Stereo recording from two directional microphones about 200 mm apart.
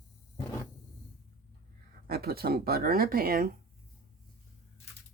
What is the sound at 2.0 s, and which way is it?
Speech, 50° right (ahead or behind).